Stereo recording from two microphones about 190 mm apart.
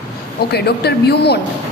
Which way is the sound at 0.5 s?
60° left (ahead or behind).